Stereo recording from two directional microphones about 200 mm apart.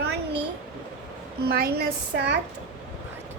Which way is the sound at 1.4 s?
50° right (ahead or behind).